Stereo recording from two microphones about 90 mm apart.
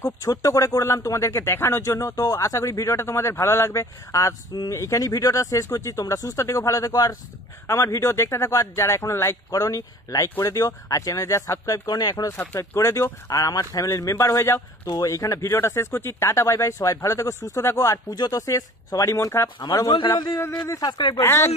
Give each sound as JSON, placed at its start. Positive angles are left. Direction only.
{"t": 0.0, "sound": "speech", "side_deg": 40}
{"t": 7.6, "sound": "speech", "side_deg": 35}
{"t": 11.8, "sound": "speech", "side_deg": 50}
{"t": 12.3, "sound": "speech", "side_deg": 35}
{"t": 19.9, "sound": "a man's voice", "side_deg": 65}
{"t": 21.2, "sound": "speech", "side_deg": 30}